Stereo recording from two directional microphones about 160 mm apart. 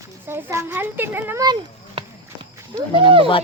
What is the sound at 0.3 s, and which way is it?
A child's voice, 15° right (ahead or behind).